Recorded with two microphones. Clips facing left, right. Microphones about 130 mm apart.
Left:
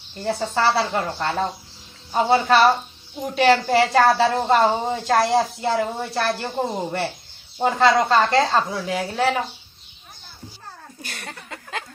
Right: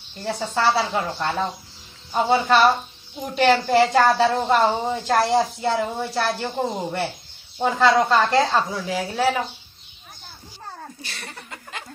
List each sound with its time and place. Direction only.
0.2 s a woman's voice: centre (ahead or behind)
2.1 s a woman's voice: centre (ahead or behind)
7.9 s a woman's voice: 5° right (ahead or behind)
11.0 s a sound: 45° left (ahead or behind)